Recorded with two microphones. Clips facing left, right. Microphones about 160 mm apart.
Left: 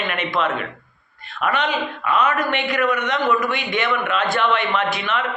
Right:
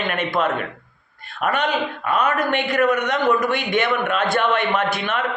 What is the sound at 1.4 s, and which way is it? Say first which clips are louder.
A man's voice: right 1 dB; 45° right (ahead or behind).